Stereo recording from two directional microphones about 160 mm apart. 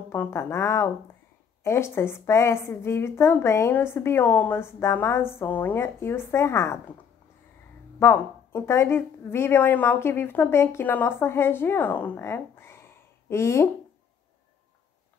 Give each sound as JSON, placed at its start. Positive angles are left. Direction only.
{"t": 0.1, "sound": "a woman's voice", "side_deg": 15}
{"t": 8.0, "sound": "a woman's voice", "side_deg": 15}